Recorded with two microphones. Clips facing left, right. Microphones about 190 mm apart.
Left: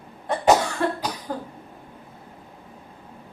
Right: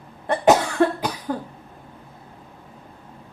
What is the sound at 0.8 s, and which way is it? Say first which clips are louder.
Cough: right 6 dB; 65° right (ahead or behind).